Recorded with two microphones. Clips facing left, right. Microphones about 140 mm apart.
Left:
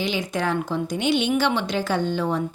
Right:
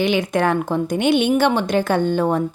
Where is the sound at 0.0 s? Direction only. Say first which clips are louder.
Right 7 dB; 60° right (ahead or behind).